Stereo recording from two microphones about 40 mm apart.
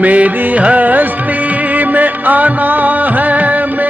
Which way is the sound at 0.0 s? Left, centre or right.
Right.